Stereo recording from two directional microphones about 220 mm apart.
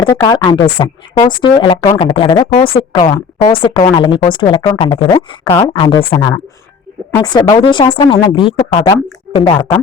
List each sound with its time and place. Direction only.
0.0 s speech: 20° left (ahead or behind)